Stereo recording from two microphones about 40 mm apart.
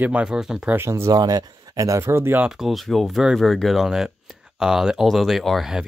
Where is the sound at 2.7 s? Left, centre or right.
Centre.